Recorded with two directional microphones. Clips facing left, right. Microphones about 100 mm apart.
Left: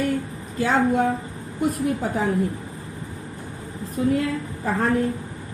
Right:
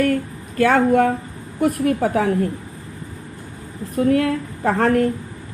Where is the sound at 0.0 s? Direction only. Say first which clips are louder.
Right 5 dB; 65° right (ahead or behind).